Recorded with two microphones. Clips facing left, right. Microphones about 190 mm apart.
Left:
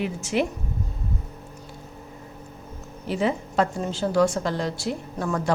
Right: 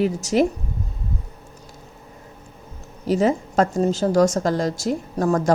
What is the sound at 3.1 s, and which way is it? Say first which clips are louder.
A woman's voice: right 6 dB; 40° right (ahead or behind).